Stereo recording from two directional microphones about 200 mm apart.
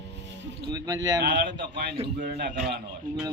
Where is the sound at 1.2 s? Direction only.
55° right (ahead or behind).